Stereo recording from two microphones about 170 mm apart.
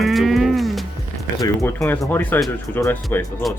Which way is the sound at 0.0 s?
Centre (ahead or behind).